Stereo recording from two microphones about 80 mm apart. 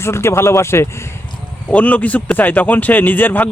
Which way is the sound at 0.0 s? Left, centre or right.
Left.